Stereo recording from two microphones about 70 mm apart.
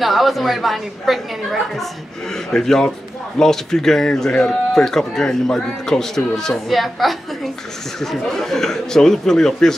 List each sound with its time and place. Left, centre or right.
0.0 s a woman's voice: centre